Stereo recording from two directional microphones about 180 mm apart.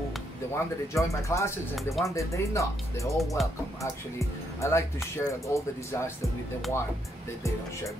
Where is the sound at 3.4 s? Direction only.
Centre (ahead or behind).